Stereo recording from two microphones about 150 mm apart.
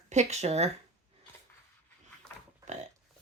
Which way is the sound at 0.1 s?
50° right (ahead or behind).